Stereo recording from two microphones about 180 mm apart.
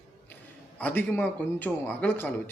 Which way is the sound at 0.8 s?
10° left (ahead or behind).